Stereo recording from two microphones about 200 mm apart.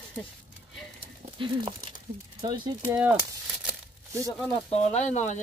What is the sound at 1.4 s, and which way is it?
Speech, 25° right (ahead or behind).